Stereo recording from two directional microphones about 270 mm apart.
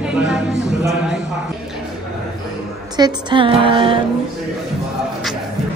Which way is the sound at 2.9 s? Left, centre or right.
Centre.